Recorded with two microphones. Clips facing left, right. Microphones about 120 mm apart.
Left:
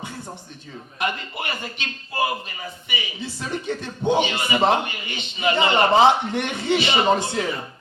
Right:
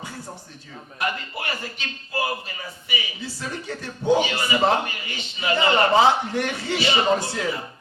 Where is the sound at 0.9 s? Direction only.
20° left (ahead or behind).